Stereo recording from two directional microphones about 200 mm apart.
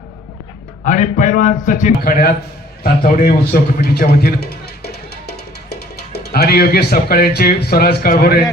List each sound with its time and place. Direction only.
0.9 s a man's voice: 40° left (ahead or behind)
2.8 s a sound: 50° left (ahead or behind)
6.1 s speech: 55° left (ahead or behind)